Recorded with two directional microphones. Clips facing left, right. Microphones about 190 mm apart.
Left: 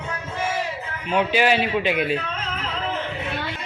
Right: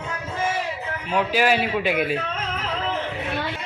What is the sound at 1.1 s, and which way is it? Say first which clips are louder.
Speech: left 1 dB; centre (ahead or behind).